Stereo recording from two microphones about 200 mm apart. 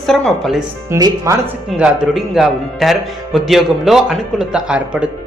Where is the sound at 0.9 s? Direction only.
15° right (ahead or behind).